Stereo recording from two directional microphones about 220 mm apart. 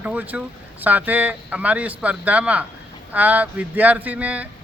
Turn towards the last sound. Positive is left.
turn(degrees=-5)  # may be behind; listen again after turning